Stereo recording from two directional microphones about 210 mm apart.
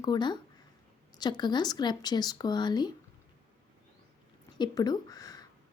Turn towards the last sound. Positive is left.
turn(degrees=15)  # may be behind; listen again after turning